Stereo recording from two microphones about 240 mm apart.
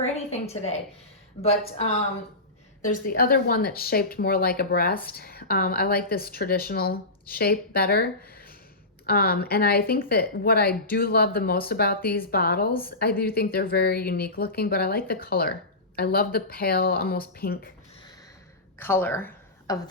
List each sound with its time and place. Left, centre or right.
0.4 s a woman's voice: left
2.8 s speech: left
18.8 s speech: centre